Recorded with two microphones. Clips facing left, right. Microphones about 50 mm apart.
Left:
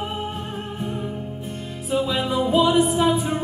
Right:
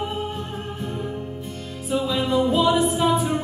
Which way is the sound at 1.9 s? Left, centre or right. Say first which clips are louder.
Even; centre.